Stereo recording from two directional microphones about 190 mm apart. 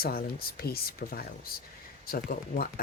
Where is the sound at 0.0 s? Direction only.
50° left (ahead or behind).